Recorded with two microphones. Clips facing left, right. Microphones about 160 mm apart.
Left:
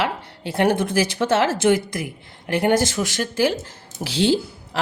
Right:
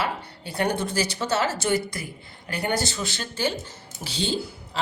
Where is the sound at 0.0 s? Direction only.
85° left.